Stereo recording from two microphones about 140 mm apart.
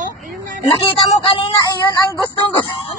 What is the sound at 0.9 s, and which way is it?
Speech, 40° left (ahead or behind).